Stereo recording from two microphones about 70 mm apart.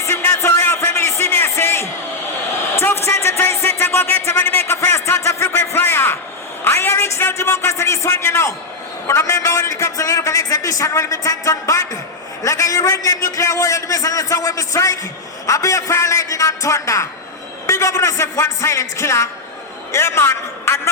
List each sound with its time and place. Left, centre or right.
0.0 s music: left
6.7 s a man's voice: left